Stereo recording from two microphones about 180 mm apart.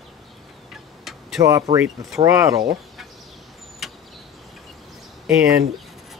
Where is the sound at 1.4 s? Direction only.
15° right (ahead or behind).